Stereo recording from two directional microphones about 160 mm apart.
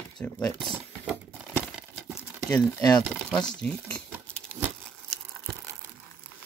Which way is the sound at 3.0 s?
5° left (ahead or behind).